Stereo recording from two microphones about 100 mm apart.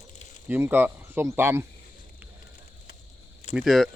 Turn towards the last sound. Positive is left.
turn(degrees=0)  # may be behind; listen again after turning